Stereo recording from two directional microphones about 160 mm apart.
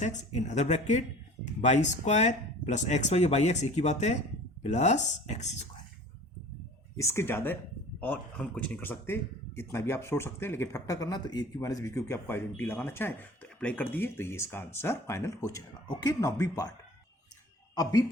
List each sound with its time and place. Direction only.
0.0 s speech: 45° left (ahead or behind)
6.9 s speech: 20° left (ahead or behind)